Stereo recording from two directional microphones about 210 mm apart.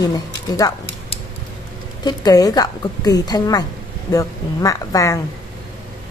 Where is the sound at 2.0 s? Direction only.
20° left (ahead or behind).